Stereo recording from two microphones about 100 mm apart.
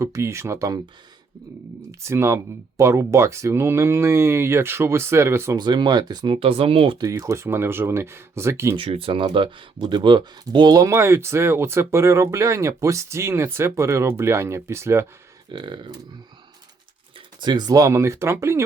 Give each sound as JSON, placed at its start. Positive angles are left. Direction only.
{"t": 0.0, "sound": "speech", "side_deg": -30}
{"t": 1.9, "sound": "speech", "side_deg": -30}
{"t": 5.5, "sound": "speech", "side_deg": -50}
{"t": 6.4, "sound": "speech", "side_deg": -70}
{"t": 7.0, "sound": "speech", "side_deg": -30}
{"t": 8.7, "sound": "speech", "side_deg": -65}
{"t": 15.5, "sound": "speech", "side_deg": -50}
{"t": 17.4, "sound": "speech", "side_deg": -45}